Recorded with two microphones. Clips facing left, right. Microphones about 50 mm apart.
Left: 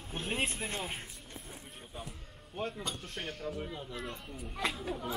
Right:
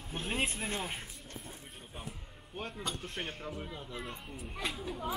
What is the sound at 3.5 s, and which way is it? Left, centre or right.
Speech, centre.